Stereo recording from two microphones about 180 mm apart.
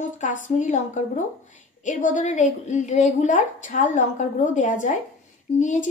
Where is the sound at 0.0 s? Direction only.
45° left (ahead or behind).